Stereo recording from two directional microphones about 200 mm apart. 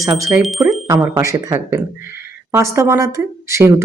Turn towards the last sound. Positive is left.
turn(degrees=-15)  # may be behind; listen again after turning